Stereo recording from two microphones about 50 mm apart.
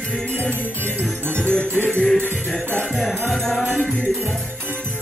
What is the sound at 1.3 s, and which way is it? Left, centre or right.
Music, centre.